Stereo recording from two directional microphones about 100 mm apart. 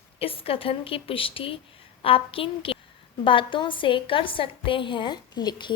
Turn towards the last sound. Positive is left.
turn(degrees=50)  # may be behind; listen again after turning